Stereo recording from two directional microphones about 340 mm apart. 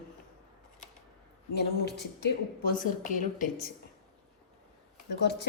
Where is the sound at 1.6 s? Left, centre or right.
Left.